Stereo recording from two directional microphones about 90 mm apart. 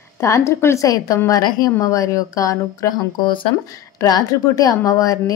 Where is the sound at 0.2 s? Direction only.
30° left (ahead or behind).